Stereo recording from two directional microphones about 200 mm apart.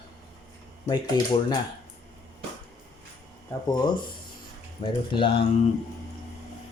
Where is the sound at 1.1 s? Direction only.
20° left (ahead or behind).